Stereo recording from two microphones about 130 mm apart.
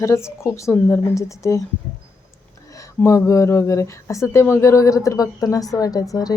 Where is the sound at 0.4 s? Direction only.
20° left (ahead or behind).